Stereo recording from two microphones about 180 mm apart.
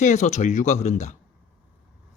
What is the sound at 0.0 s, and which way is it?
A man's voice, 40° left (ahead or behind).